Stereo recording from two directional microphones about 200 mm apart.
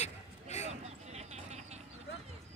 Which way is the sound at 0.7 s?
35° right (ahead or behind).